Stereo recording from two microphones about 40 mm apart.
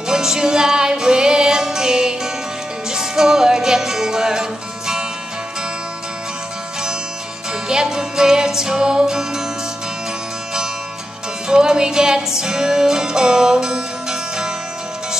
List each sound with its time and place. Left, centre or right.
0.1 s music: centre
7.6 s music: centre
11.4 s music: centre